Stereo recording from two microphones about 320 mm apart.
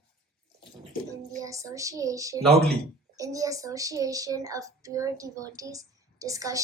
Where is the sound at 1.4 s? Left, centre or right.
Centre.